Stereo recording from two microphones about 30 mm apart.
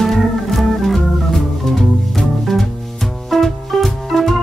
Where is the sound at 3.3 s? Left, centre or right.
Centre.